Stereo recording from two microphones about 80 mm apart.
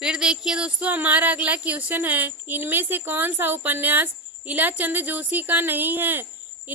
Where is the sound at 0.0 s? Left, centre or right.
Centre.